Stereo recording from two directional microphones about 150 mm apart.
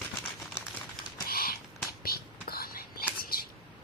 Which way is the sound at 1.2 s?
85° left.